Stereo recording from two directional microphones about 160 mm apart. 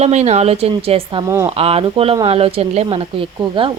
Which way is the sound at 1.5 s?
35° right (ahead or behind).